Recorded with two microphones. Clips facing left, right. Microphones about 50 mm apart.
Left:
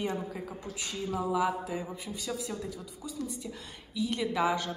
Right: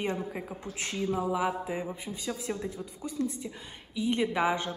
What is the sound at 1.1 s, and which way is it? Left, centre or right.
A man's voice, right.